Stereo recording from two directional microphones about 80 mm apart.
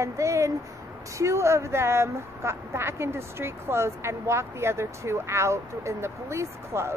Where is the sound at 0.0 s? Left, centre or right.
Right.